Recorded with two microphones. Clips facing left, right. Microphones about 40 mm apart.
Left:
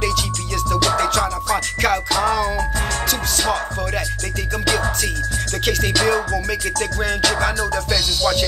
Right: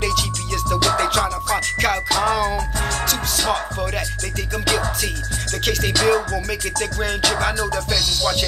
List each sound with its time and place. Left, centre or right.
0.9 s music: centre
2.3 s music: centre
5.7 s music: centre